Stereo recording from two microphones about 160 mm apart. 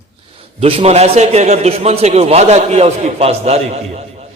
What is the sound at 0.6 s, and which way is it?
A man's voice, 40° right (ahead or behind).